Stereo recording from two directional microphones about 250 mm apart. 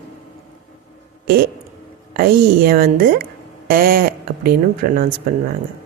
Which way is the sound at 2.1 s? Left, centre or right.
Right.